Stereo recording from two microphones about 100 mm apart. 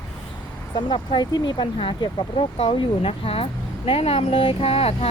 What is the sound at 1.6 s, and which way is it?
Speech, 60° left (ahead or behind).